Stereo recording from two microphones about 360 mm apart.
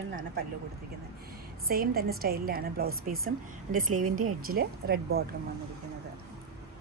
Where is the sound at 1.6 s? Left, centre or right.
Right.